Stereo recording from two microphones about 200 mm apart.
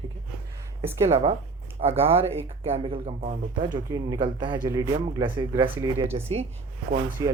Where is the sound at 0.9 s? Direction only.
10° right (ahead or behind).